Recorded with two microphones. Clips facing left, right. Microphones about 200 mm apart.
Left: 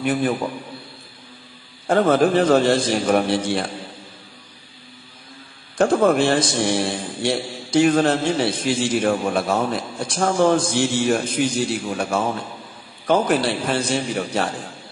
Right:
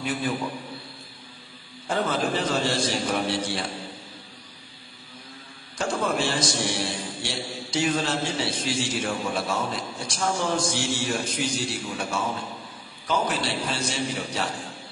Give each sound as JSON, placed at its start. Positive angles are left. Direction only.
{"t": 0.0, "sound": "a man's voice", "side_deg": 55}
{"t": 1.9, "sound": "a man's voice", "side_deg": 55}
{"t": 5.8, "sound": "a man's voice", "side_deg": 55}